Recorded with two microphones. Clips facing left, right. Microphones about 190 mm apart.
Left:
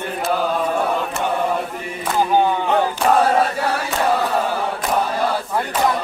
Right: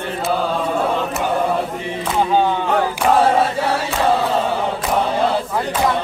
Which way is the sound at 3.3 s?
25° right (ahead or behind).